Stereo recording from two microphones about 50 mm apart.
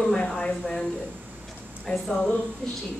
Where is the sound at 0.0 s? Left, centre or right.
Centre.